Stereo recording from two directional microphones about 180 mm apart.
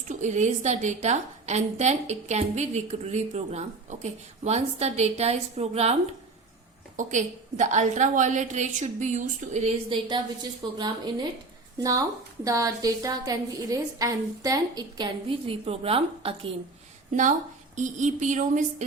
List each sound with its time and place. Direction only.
0.1 s a woman's voice: 40° right (ahead or behind)
10.8 s a woman's voice: 25° right (ahead or behind)
17.7 s a woman's voice: 40° right (ahead or behind)